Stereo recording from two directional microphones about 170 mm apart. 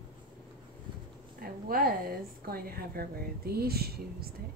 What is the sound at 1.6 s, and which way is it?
A woman's voice, 60° right (ahead or behind).